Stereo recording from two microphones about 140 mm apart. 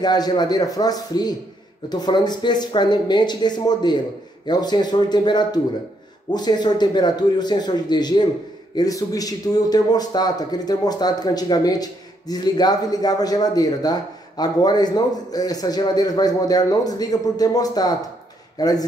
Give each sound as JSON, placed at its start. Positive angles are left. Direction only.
{"t": 0.0, "sound": "a man's voice", "side_deg": 30}